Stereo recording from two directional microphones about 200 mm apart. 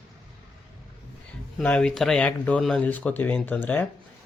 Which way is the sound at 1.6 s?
5° left (ahead or behind).